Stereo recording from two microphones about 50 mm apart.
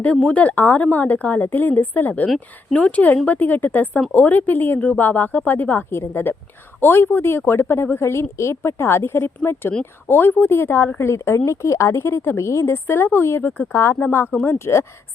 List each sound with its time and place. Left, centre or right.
0.3 s a woman's voice: left
5.9 s a woman's voice: left
11.0 s speech: left
12.5 s speech: left
12.7 s speech: left
14.4 s a woman's voice: left